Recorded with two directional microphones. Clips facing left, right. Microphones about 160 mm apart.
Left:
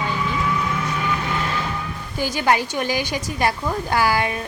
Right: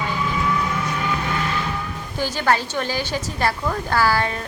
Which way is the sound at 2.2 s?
15° left (ahead or behind).